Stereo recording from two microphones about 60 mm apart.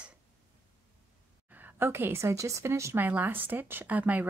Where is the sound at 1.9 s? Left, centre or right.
Right.